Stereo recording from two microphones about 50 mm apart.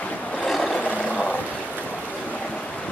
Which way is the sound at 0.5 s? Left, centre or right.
Centre.